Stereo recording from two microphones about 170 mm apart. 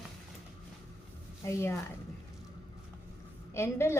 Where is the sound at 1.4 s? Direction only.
15° left (ahead or behind).